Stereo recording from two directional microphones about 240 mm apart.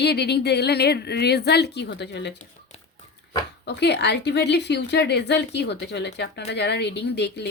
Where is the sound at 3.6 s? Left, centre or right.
Left.